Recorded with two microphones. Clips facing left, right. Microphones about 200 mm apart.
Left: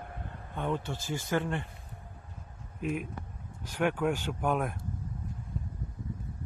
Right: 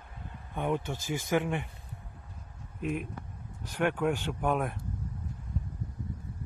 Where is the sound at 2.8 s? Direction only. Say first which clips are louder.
Even; centre (ahead or behind).